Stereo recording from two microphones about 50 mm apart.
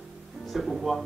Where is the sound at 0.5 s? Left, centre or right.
Centre.